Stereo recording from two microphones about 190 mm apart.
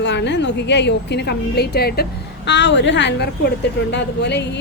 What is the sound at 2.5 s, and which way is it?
A woman's voice, 65° left (ahead or behind).